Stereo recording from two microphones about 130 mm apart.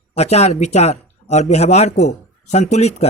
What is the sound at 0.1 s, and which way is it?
Speech, 55° left (ahead or behind).